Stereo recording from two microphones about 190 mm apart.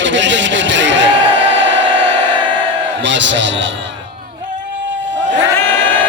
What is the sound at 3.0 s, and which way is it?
Speech, 75° right (ahead or behind).